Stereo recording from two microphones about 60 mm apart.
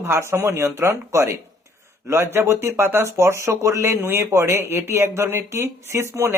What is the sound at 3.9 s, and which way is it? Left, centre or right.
Speech, right.